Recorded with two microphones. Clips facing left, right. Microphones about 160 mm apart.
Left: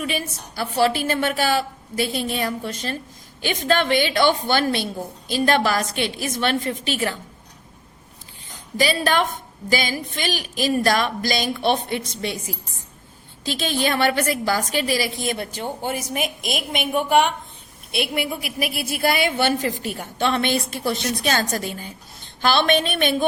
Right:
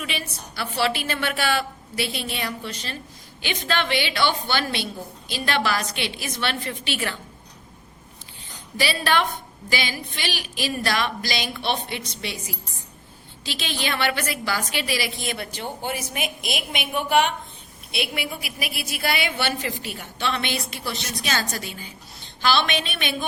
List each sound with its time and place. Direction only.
0.0 s a woman's voice: 40° left (ahead or behind)
8.8 s a woman's voice: 45° left (ahead or behind)
13.4 s a woman's voice: 45° left (ahead or behind)